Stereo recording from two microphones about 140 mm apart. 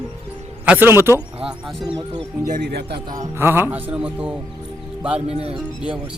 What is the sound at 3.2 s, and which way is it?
Speech, 15° right (ahead or behind).